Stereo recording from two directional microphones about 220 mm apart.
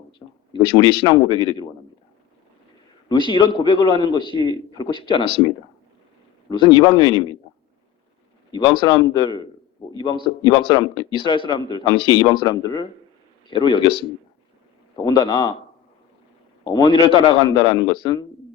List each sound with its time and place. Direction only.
0.5 s a man's voice: 20° left (ahead or behind)
3.1 s a man's voice: 20° left (ahead or behind)
6.5 s a man's voice: 20° left (ahead or behind)
8.9 s a man's voice: 20° left (ahead or behind)
16.6 s a man's voice: 20° left (ahead or behind)